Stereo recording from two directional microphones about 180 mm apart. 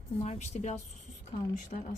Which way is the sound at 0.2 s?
40° left (ahead or behind).